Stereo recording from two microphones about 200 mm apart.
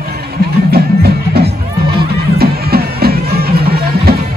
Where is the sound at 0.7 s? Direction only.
50° right (ahead or behind).